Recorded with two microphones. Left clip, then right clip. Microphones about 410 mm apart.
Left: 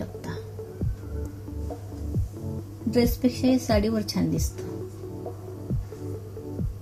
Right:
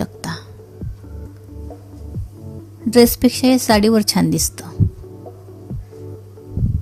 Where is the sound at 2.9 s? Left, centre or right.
Right.